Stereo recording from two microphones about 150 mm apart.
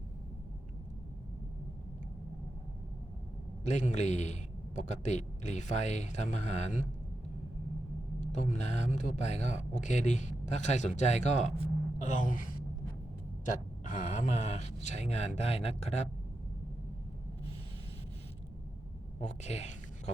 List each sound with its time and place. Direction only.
3.6 s speech: 50° left (ahead or behind)
8.2 s speech: 55° left (ahead or behind)
11.9 s gasp: 55° left (ahead or behind)
13.5 s speech: 60° left (ahead or behind)
19.2 s speech: 50° left (ahead or behind)